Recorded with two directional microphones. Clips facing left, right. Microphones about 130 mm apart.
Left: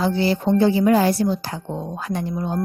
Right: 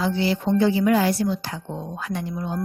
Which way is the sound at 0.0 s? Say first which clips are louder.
Left 3 dB; 35° left (ahead or behind).